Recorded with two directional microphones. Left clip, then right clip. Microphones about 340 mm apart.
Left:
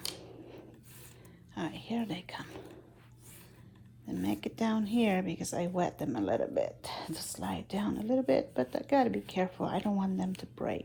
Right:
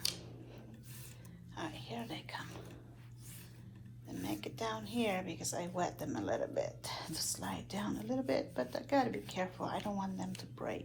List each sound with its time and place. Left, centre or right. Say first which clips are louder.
1.5 s speech: left 6 dB; left
4.0 s speech: left 6 dB; left